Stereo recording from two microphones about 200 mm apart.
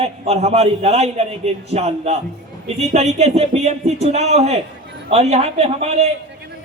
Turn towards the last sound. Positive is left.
turn(degrees=-30)  # may be behind; listen again after turning